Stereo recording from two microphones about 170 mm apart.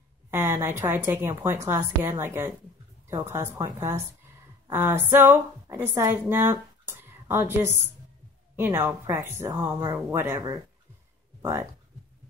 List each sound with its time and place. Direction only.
0.3 s a woman's voice: 15° right (ahead or behind)
4.6 s a woman's voice: 15° right (ahead or behind)